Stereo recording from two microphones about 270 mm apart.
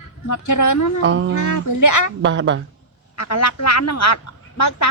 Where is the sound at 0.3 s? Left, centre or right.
Left.